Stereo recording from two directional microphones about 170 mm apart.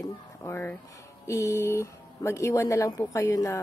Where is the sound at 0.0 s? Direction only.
15° left (ahead or behind).